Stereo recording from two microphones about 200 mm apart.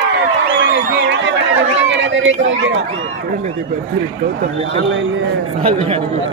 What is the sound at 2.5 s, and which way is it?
Speech, 75° right (ahead or behind).